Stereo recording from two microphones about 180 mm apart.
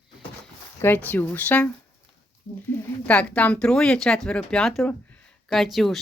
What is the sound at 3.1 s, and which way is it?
Speech, 5° left (ahead or behind).